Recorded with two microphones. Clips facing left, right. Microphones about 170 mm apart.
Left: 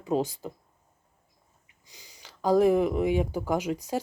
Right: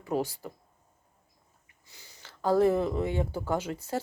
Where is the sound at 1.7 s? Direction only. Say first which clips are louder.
Left 2 dB; 15° left (ahead or behind).